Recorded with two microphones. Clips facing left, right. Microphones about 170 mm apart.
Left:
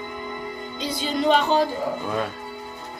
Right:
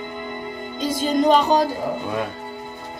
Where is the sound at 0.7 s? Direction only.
45° right (ahead or behind).